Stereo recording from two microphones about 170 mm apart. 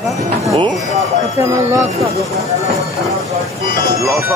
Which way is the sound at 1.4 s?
15° right (ahead or behind).